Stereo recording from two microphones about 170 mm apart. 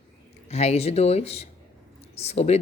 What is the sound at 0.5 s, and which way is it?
A woman's voice, 40° left (ahead or behind).